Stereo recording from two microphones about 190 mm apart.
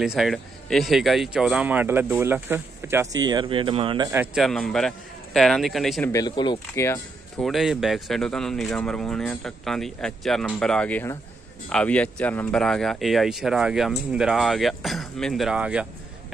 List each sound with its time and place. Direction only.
0.0 s speech: centre (ahead or behind); by 4.1 s 25° right (ahead or behind)
4.4 s speech: centre (ahead or behind)
6.0 s speech: 20° left (ahead or behind)
7.4 s speech: centre (ahead or behind)